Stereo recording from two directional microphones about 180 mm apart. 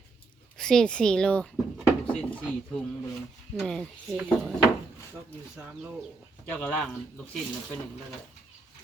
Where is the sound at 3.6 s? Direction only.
5° left (ahead or behind).